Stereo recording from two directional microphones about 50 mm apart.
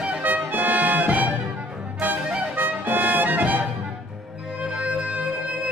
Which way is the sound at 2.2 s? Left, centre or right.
Centre.